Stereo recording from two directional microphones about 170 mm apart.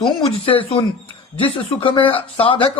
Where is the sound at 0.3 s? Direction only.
35° left (ahead or behind).